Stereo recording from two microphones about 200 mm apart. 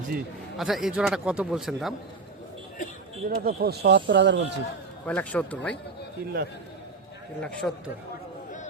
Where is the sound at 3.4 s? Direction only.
50° right (ahead or behind).